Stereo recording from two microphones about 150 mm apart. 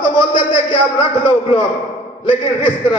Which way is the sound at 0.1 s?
35° left (ahead or behind).